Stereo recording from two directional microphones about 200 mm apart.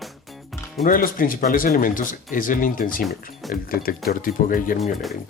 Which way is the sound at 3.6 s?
45° left (ahead or behind).